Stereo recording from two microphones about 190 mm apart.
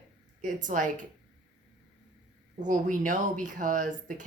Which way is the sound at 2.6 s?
45° right (ahead or behind).